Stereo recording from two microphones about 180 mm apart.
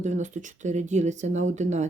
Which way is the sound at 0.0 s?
40° right (ahead or behind).